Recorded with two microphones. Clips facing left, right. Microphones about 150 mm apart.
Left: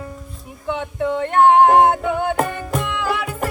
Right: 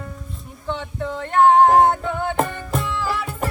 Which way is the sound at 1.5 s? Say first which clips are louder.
Left 1 dB; centre (ahead or behind).